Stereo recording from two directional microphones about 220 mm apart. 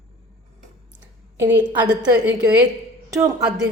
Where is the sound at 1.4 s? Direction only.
10° right (ahead or behind).